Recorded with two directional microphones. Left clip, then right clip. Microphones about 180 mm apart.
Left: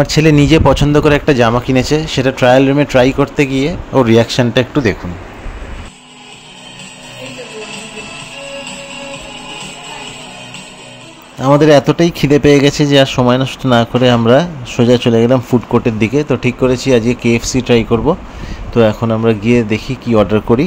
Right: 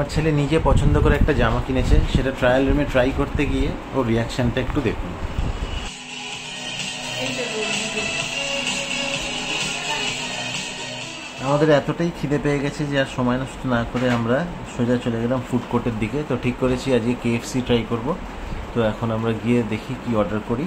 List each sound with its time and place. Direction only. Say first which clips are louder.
0.0 s speech: left 12 dB; 50° left (ahead or behind)
11.4 s speech: left 10 dB; 45° left (ahead or behind)